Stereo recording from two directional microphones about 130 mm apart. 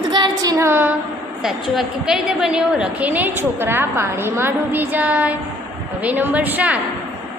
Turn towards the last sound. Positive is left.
turn(degrees=-10)  # may be behind; listen again after turning